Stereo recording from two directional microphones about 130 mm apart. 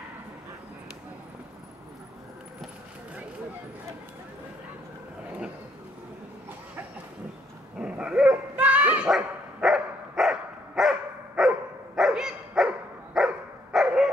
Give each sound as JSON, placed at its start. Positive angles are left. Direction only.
{"t": 7.8, "sound": "dog", "side_deg": -5}